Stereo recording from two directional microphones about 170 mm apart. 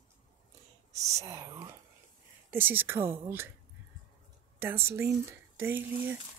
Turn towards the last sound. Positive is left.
turn(degrees=-10)  # may be behind; listen again after turning